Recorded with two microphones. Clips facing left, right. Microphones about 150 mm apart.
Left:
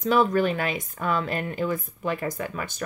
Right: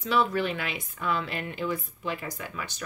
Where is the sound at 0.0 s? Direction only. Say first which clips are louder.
Left 5 dB; 45° left (ahead or behind).